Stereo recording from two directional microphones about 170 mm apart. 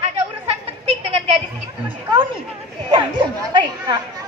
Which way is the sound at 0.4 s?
35° right (ahead or behind).